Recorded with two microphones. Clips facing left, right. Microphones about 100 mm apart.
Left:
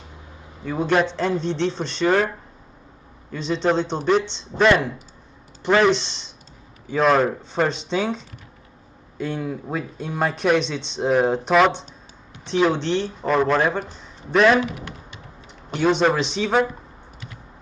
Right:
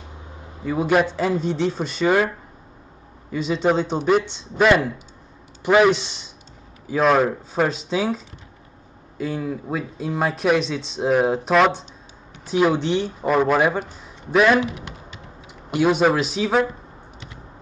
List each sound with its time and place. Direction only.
0.7 s a man's voice: 5° right (ahead or behind)
9.2 s a man's voice: centre (ahead or behind)
14.6 s speech: 20° right (ahead or behind)
15.7 s speech: 5° right (ahead or behind)